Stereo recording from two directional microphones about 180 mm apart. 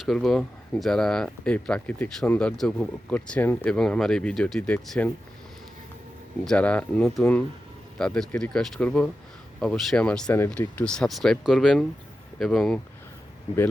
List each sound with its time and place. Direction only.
0.0 s speech: centre (ahead or behind)
6.4 s speech: 5° left (ahead or behind)